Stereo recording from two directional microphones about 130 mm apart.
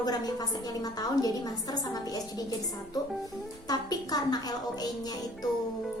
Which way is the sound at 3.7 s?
30° left (ahead or behind).